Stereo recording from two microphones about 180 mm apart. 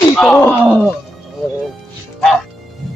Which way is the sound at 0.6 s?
10° right (ahead or behind).